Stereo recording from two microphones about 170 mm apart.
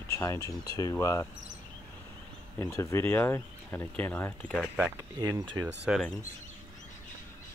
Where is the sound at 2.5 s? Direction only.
15° left (ahead or behind).